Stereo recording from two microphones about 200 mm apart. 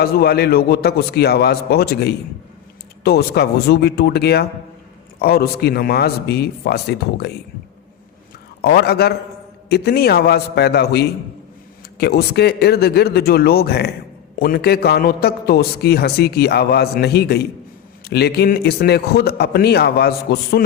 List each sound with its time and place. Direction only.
0.0 s a man's voice: 50° left (ahead or behind)
8.6 s a man's voice: 50° left (ahead or behind)